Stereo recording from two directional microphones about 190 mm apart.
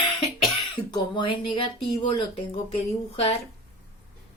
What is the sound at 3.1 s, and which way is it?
Speech, 30° left (ahead or behind).